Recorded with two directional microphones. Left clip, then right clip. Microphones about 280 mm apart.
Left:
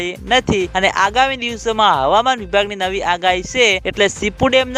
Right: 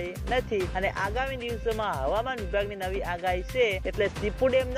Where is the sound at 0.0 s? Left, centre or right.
Left.